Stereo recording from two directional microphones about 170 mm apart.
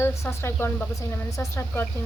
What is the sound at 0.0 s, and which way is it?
Speech, 15° left (ahead or behind).